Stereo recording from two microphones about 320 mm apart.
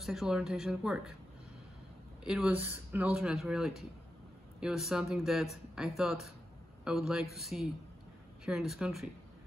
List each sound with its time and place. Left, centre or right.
0.0 s speech: centre
2.2 s a man's voice: centre